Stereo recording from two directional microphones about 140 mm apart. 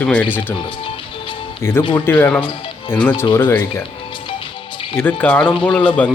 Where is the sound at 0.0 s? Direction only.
10° left (ahead or behind).